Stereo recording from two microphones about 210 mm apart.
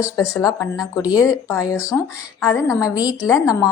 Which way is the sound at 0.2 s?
15° left (ahead or behind).